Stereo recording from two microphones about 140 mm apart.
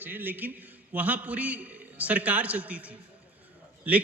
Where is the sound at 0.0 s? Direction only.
15° right (ahead or behind).